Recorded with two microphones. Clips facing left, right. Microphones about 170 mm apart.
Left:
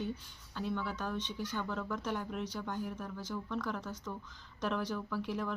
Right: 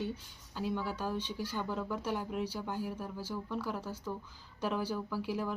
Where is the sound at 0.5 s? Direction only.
10° right (ahead or behind).